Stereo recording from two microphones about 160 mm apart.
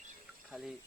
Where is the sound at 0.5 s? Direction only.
Centre (ahead or behind).